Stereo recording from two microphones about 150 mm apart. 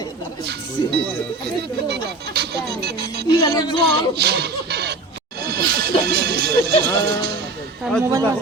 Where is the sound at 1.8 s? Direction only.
90° right.